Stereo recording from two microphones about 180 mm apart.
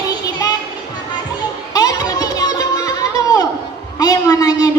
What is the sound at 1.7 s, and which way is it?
Music, 20° left (ahead or behind).